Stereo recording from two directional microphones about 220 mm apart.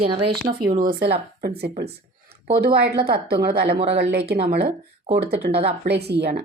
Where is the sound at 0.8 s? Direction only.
40° right (ahead or behind).